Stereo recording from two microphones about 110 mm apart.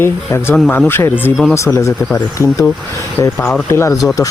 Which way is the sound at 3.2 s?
35° left (ahead or behind).